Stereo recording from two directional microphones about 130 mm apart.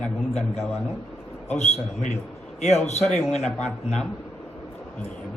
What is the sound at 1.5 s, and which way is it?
Speech, 60° left (ahead or behind).